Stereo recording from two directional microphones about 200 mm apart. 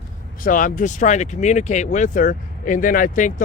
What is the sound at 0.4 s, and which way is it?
Speech, 40° left (ahead or behind).